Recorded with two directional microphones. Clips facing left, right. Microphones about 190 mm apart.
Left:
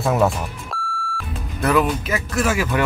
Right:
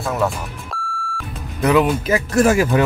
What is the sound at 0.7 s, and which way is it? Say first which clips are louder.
Beep: even; centre (ahead or behind).